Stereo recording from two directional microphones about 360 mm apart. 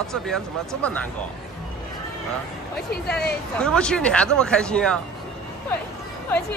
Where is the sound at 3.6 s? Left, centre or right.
Centre.